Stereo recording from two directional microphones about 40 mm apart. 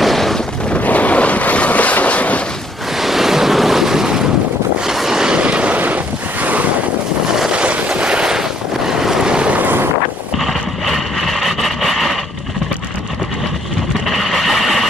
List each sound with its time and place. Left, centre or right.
0.0 s vehicle: centre
0.7 s boat: left
3.0 s waves: centre
4.9 s vehicle: centre
5.4 s vehicle: right
7.5 s boat: right
7.9 s a sound: right
8.4 s vehicle: centre
9.3 s boat: right
9.6 s wind noise: right
10.3 s vehicle: centre
14.0 s a sound: centre